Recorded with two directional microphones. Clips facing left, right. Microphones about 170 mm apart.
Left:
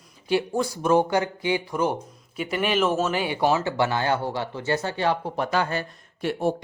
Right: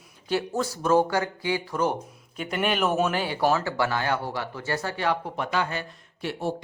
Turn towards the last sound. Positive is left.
turn(degrees=50)  # may be behind; listen again after turning